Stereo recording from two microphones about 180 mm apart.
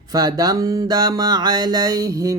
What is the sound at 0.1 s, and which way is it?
Mantra, 20° right (ahead or behind).